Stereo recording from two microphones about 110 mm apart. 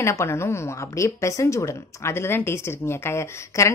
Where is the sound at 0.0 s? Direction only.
25° left (ahead or behind).